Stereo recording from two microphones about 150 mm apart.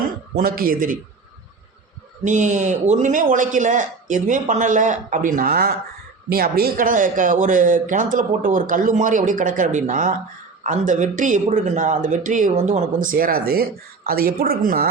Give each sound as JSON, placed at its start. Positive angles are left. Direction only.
{"t": 0.3, "sound": "a man's voice", "side_deg": -75}
{"t": 2.2, "sound": "speech", "side_deg": -55}